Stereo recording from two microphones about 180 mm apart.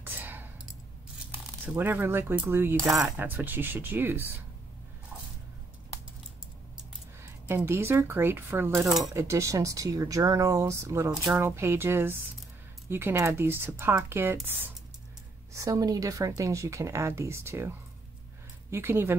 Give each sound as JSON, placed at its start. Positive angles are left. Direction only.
{"t": 0.0, "sound": "clicking", "side_deg": -10}
{"t": 1.7, "sound": "speech", "side_deg": -10}
{"t": 7.4, "sound": "speech", "side_deg": -15}